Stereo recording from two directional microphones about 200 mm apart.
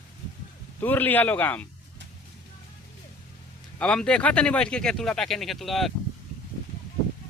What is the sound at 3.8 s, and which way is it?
Speech, 5° left (ahead or behind).